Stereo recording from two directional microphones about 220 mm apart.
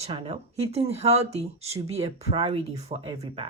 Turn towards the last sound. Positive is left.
turn(degrees=-25)  # may be behind; listen again after turning